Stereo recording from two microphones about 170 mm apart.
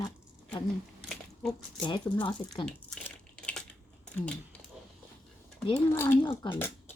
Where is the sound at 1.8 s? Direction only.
30° left (ahead or behind).